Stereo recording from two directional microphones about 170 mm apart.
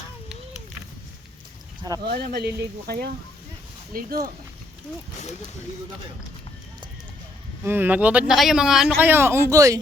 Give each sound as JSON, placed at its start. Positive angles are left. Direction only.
{"t": 2.0, "sound": "speech", "side_deg": -70}
{"t": 7.6, "sound": "speech", "side_deg": -10}